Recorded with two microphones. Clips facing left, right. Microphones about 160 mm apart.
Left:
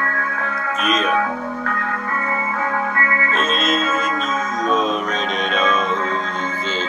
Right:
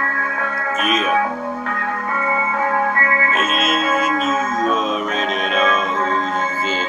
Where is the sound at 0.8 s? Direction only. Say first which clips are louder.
Even; 5° right (ahead or behind).